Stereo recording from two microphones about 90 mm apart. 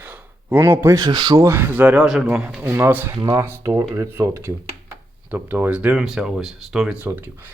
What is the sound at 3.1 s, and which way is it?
Speech, 40° right (ahead or behind).